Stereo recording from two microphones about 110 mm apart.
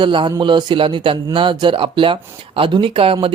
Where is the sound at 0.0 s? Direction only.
45° right (ahead or behind).